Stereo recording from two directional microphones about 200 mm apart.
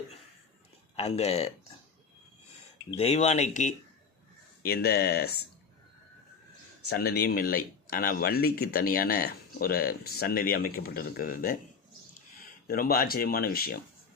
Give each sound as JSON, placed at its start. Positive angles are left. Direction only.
{"t": 0.9, "sound": "speech", "side_deg": 30}
{"t": 3.0, "sound": "speech", "side_deg": 30}
{"t": 4.6, "sound": "speech", "side_deg": 50}
{"t": 6.8, "sound": "speech", "side_deg": 55}
{"t": 12.6, "sound": "speech", "side_deg": 45}